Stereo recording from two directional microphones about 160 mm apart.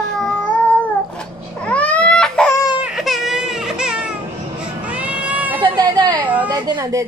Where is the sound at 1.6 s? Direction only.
10° left (ahead or behind).